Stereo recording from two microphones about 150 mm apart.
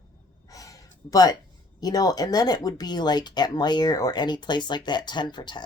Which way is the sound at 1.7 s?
25° left (ahead or behind).